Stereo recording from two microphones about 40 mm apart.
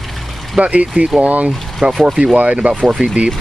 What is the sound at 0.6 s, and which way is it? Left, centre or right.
Speech, right.